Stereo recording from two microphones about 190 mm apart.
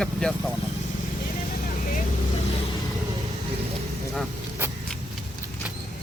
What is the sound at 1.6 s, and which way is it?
Vehicle, 45° left (ahead or behind).